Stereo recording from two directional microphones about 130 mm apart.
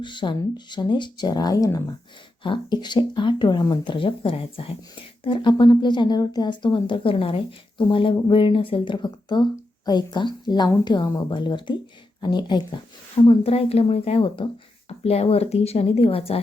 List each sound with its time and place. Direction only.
0.0 s speech: 35° left (ahead or behind)
3.9 s speech: 45° left (ahead or behind)